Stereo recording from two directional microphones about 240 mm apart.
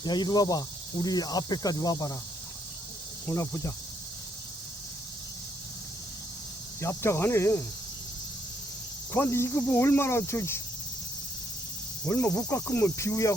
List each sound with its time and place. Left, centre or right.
0.0 s speech: centre
3.2 s speech: centre
6.8 s speech: centre
9.1 s speech: centre
12.0 s speech: centre